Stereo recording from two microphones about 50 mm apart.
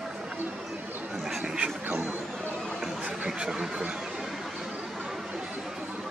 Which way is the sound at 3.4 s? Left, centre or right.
Centre.